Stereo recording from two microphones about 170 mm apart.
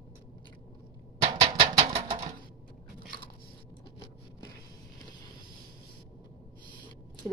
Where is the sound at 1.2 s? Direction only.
30° right (ahead or behind).